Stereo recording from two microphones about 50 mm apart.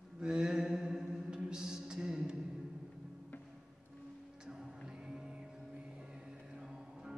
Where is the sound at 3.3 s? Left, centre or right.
Left.